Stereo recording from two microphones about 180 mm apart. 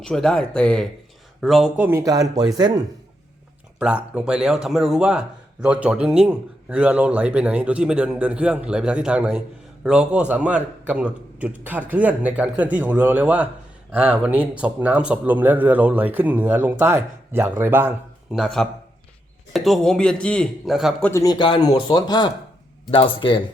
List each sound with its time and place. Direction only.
0.0 s speech: 5° left (ahead or behind)
1.8 s speech: 15° right (ahead or behind)
3.8 s a man's voice: 5° right (ahead or behind)
18.3 s speech: centre (ahead or behind)
21.1 s speech: 20° left (ahead or behind)